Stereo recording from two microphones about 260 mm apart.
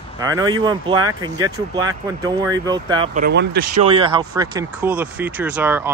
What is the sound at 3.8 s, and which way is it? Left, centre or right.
Speech, right.